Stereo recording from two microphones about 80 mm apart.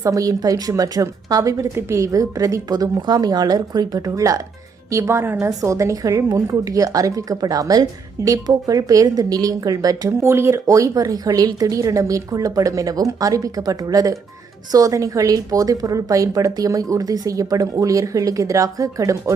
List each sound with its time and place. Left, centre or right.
0.0 s a woman's voice: right
5.5 s speech: right